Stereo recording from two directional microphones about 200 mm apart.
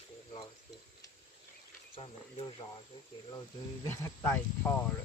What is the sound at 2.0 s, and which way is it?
Speech, 30° left (ahead or behind).